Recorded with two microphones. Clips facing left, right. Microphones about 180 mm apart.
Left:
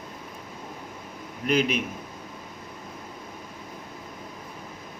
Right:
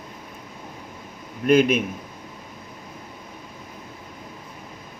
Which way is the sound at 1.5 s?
50° right (ahead or behind).